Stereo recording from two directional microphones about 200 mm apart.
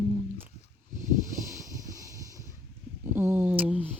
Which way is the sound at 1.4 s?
15° right (ahead or behind).